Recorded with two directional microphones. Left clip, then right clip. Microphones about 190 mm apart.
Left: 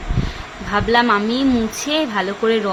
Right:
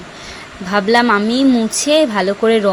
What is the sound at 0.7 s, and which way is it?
A woman's voice, 30° right (ahead or behind).